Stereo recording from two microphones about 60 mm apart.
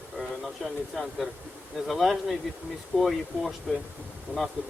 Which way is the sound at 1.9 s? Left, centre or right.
Centre.